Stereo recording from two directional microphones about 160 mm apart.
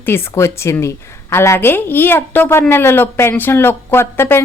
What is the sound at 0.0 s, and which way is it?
A woman's voice, 15° left (ahead or behind).